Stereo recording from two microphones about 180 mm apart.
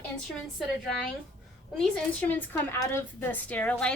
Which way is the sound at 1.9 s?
10° left (ahead or behind).